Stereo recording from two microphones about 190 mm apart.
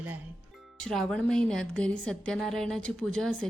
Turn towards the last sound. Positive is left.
turn(degrees=5)  # may be behind; listen again after turning